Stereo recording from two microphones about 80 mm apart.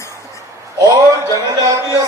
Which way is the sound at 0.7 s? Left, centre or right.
Right.